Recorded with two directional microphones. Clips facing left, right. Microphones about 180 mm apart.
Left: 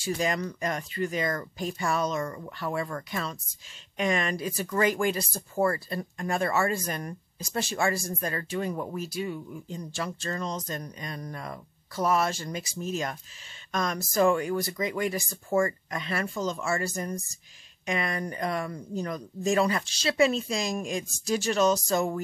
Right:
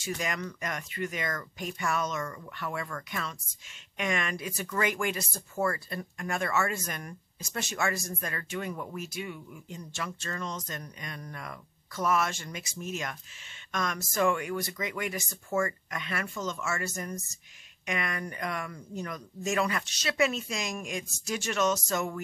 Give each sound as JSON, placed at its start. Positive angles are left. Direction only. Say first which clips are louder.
{"t": 0.0, "sound": "speech", "louder": "left 5 dB", "side_deg": 30}